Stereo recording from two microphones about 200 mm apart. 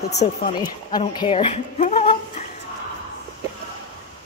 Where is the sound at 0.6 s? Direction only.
20° left (ahead or behind).